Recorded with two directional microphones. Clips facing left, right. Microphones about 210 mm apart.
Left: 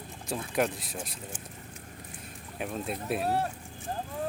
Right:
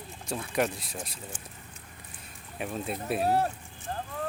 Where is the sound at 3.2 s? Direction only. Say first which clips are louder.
Right 4 dB; 40° right (ahead or behind).